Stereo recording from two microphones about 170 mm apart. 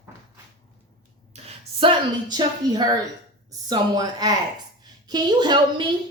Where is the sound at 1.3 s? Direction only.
40° right (ahead or behind).